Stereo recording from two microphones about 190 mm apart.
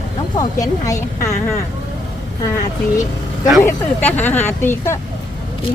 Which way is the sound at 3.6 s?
10° left (ahead or behind).